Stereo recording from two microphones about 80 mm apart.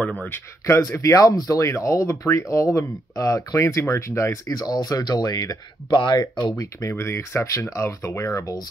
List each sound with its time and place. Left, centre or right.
0.2 s speech: left
0.7 s speech: left
4.6 s speech: left
5.9 s speech: left
6.5 s speech: left
6.9 s speech: left